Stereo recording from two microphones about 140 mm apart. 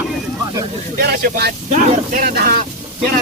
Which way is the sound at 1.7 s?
75° right (ahead or behind).